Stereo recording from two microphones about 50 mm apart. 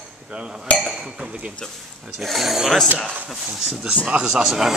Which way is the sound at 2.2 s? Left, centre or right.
Centre.